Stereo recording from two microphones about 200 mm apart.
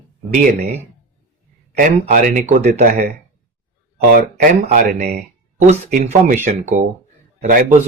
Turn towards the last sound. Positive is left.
turn(degrees=-40)  # may be behind; listen again after turning